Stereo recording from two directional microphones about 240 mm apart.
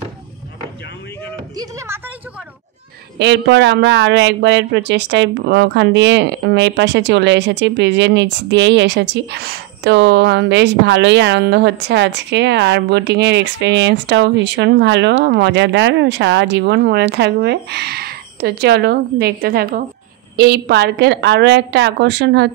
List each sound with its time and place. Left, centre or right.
1.6 s speech: centre
3.2 s speech: right